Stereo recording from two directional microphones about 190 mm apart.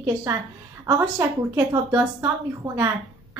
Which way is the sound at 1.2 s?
15° right (ahead or behind).